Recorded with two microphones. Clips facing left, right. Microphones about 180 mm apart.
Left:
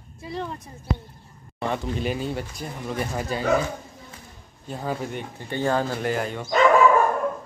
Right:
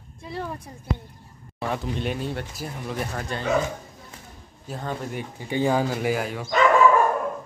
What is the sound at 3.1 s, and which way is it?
Speech, 10° left (ahead or behind).